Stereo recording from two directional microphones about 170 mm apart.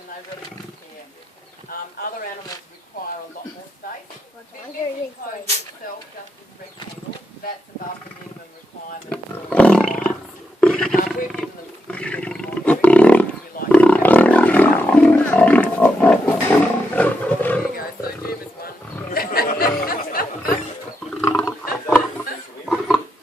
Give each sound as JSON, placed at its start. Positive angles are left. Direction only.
{"t": 9.0, "sound": "roaring cats", "side_deg": 5}
{"t": 10.6, "sound": "roar", "side_deg": 5}
{"t": 11.9, "sound": "roaring cats", "side_deg": 5}
{"t": 17.7, "sound": "wild animals", "side_deg": 60}
{"t": 19.8, "sound": "a sound", "side_deg": 60}
{"t": 21.2, "sound": "wild animals", "side_deg": 10}
{"t": 22.6, "sound": "a sound", "side_deg": 0}